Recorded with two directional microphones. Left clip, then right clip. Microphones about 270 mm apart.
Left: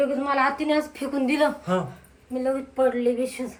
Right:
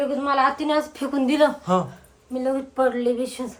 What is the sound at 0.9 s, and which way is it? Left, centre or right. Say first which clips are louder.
Speech: right 2 dB; centre.